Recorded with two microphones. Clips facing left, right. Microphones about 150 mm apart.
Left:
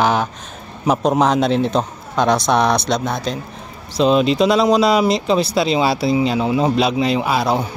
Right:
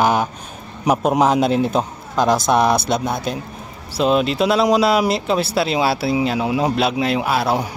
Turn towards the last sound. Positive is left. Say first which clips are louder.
# left 1 dB
turn(degrees=-5)  # may be behind; listen again after turning